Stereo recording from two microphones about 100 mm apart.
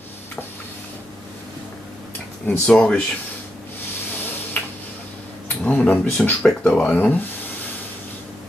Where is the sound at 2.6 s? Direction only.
10° left (ahead or behind).